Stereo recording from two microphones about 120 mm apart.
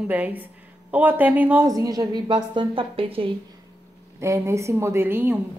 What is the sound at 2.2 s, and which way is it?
A woman's voice, 45° right (ahead or behind).